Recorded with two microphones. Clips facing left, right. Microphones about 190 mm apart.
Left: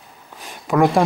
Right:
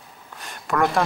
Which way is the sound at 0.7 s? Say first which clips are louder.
Left 6 dB; 20° left (ahead or behind).